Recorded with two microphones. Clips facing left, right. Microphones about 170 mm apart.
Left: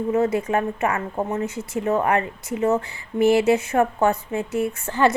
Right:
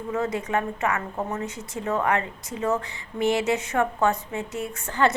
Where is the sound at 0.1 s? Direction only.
30° left (ahead or behind).